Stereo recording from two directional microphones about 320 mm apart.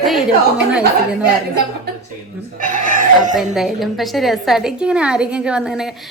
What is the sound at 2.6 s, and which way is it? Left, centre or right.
Chicken, right.